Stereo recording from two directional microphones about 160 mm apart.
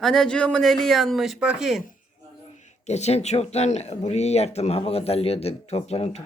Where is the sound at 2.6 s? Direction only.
45° left (ahead or behind).